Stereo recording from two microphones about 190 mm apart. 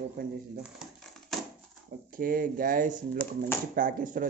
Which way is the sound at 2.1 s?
50° right (ahead or behind).